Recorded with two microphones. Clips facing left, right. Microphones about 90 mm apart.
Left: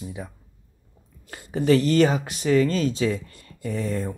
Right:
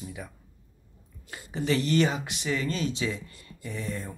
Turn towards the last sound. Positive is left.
turn(degrees=45)  # may be behind; listen again after turning